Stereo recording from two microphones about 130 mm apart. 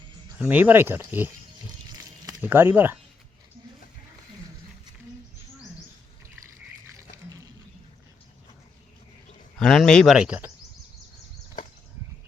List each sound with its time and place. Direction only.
0.3 s speech: 15° right (ahead or behind)
2.4 s speech: 15° right (ahead or behind)
9.6 s speech: 5° left (ahead or behind)